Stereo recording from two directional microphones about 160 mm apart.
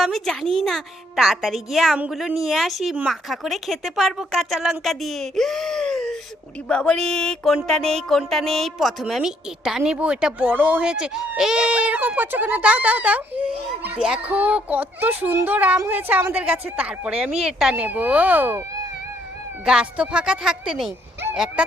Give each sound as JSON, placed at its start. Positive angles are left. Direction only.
{"t": 0.0, "sound": "a child's voice", "side_deg": 0}